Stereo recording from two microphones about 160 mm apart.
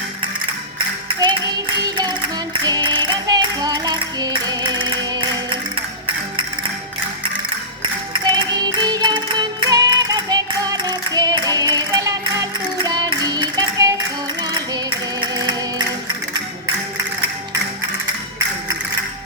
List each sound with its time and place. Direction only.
1.0 s music: 30° right (ahead or behind)
8.1 s music: 25° right (ahead or behind)